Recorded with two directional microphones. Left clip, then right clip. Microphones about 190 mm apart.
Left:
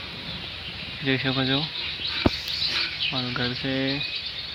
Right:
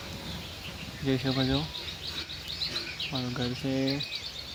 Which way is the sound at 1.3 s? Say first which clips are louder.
Left 3 dB; 15° left (ahead or behind).